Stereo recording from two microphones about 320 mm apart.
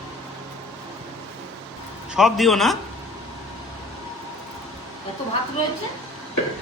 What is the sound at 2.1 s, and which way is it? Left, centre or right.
Speech, centre.